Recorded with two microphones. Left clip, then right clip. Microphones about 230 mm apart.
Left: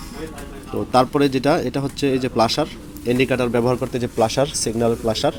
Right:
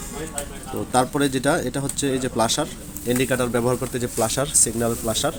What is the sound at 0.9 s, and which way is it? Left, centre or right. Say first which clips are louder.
Speech: left 4 dB; centre.